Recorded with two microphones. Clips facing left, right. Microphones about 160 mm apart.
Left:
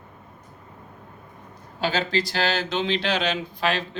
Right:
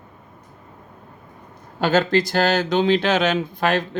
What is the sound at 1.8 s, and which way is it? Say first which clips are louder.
Speech: right 7 dB; 50° right (ahead or behind).